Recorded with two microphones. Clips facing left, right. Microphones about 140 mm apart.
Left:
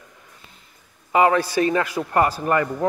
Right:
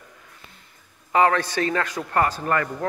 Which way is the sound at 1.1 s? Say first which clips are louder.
Left 2 dB; 10° left (ahead or behind).